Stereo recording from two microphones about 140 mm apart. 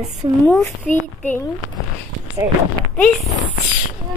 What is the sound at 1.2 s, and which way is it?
Speech, 15° left (ahead or behind).